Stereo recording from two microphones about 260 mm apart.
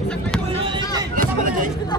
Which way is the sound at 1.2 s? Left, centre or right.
Right.